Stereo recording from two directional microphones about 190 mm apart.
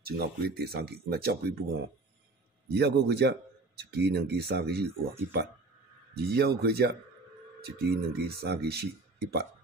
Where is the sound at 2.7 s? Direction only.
60° right (ahead or behind).